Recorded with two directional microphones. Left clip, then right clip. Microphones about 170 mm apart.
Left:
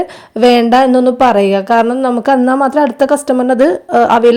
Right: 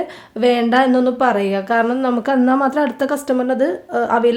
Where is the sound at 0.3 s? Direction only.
40° left (ahead or behind).